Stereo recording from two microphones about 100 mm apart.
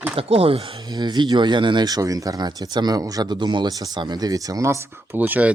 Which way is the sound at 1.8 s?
35° right (ahead or behind).